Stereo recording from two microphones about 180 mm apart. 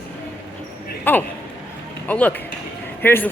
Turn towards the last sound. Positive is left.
turn(degrees=10)  # may be behind; listen again after turning